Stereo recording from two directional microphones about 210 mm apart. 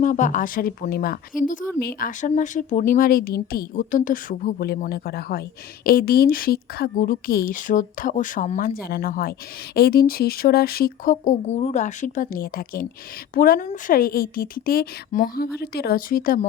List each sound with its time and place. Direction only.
0.0 s a woman's voice: 35° left (ahead or behind)